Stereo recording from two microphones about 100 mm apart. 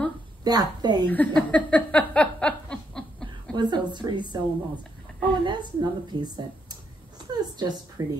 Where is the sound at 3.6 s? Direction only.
50° right (ahead or behind).